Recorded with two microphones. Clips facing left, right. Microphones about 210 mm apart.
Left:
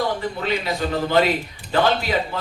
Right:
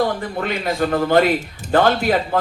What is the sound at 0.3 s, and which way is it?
A man's voice, 50° right (ahead or behind).